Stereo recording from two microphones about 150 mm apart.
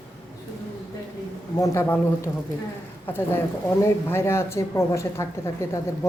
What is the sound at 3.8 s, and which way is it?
A man's voice, 15° left (ahead or behind).